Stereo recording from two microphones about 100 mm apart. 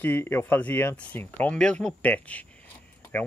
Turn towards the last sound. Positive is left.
turn(degrees=15)  # may be behind; listen again after turning